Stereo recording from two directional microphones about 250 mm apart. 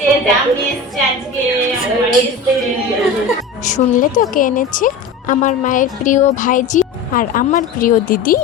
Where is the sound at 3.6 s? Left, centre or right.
Left.